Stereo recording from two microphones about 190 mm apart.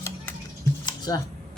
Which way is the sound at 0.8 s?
20° left (ahead or behind).